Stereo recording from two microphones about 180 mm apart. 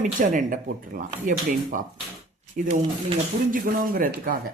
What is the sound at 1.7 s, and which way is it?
Speech, 50° right (ahead or behind).